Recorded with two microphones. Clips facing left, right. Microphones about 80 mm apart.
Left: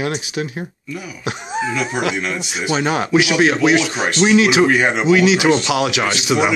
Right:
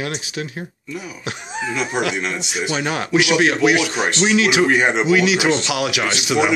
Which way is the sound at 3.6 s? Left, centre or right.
Centre.